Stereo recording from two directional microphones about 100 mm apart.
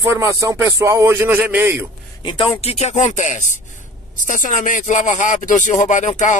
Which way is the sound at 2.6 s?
90° left.